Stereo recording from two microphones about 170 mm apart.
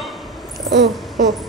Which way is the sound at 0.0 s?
Centre (ahead or behind).